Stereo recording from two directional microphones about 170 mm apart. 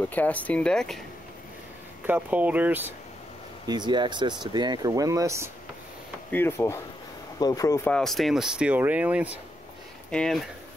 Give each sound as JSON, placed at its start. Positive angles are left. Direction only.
{"t": 0.1, "sound": "speech", "side_deg": 10}
{"t": 2.0, "sound": "speech", "side_deg": -10}
{"t": 3.6, "sound": "speech", "side_deg": -25}
{"t": 6.3, "sound": "speech", "side_deg": 15}
{"t": 7.9, "sound": "speech", "side_deg": 0}
{"t": 10.1, "sound": "speech", "side_deg": 5}